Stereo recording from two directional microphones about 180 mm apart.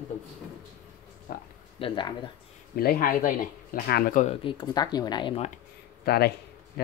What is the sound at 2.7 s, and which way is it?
Speech, 55° left (ahead or behind).